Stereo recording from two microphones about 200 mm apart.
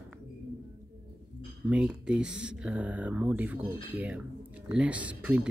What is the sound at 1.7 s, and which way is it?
Speech, 5° right (ahead or behind).